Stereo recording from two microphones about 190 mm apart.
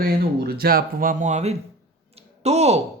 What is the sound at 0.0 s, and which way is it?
Speech, 55° right (ahead or behind).